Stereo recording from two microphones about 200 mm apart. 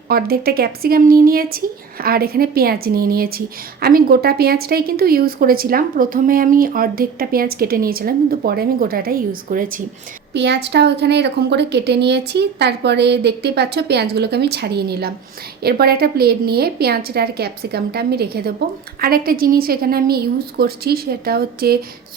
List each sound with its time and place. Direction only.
0.1 s speech: 50° right (ahead or behind)
10.3 s speech: 60° right (ahead or behind)